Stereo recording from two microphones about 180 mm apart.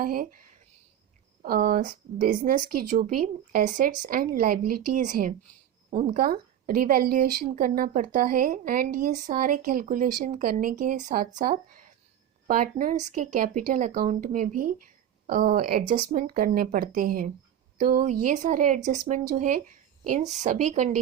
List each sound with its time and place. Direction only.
0.0 s speech: 50° right (ahead or behind)
1.4 s speech: 50° right (ahead or behind)
6.2 s speech: 55° right (ahead or behind)